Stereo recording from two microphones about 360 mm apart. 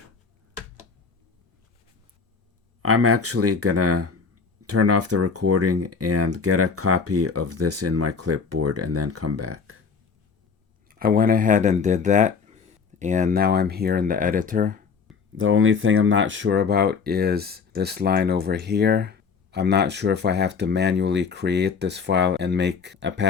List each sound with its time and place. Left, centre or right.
2.8 s speech: right
10.8 s speech: right
15.4 s speech: right